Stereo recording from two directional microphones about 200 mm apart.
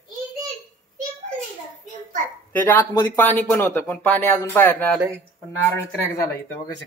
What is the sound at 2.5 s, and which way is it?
Speech, 10° left (ahead or behind).